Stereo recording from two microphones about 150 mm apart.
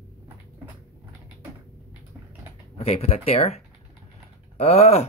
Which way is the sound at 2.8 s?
40° left (ahead or behind).